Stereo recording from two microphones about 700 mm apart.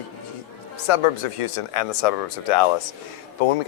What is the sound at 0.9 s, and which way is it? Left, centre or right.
Speech, left.